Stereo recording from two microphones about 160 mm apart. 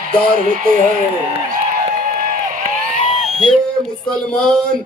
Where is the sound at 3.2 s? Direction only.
Centre (ahead or behind).